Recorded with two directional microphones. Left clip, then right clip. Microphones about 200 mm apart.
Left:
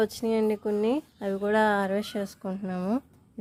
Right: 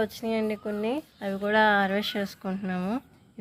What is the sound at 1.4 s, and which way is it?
Speech, 40° left (ahead or behind).